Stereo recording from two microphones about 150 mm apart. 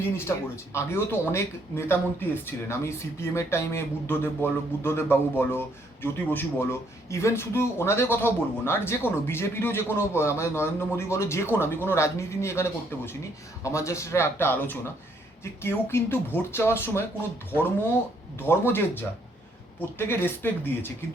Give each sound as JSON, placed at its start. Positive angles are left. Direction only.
{"t": 0.0, "sound": "speech", "side_deg": 15}
{"t": 18.3, "sound": "speech", "side_deg": 15}
{"t": 20.0, "sound": "speech", "side_deg": 15}